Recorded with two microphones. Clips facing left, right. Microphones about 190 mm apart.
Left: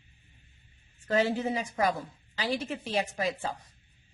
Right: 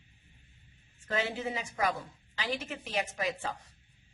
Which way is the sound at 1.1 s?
40° left (ahead or behind).